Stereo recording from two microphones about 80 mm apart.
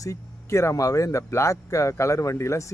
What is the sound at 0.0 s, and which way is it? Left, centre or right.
A man's voice, left.